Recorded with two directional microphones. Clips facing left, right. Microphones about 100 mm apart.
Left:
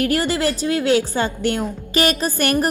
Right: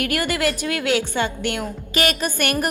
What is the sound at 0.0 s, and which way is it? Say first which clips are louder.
A woman's voice: left 3 dB; 30° left (ahead or behind).